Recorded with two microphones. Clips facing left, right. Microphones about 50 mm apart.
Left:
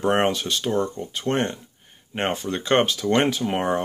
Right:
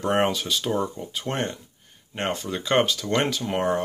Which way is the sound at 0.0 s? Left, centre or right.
Centre.